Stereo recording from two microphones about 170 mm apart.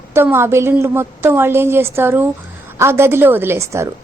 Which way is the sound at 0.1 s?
15° right (ahead or behind).